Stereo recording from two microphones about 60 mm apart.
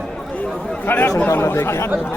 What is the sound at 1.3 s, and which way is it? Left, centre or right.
Speech, left.